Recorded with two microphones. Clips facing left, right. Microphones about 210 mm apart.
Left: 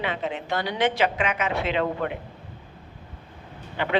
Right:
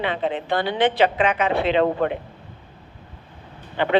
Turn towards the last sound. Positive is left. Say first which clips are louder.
# right 5 dB
turn(degrees=-30)  # may be behind; listen again after turning